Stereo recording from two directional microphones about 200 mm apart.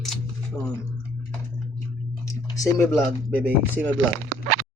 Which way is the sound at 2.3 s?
15° left (ahead or behind).